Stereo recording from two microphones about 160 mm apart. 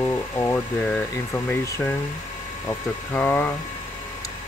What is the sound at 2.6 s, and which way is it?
Speech, 15° left (ahead or behind).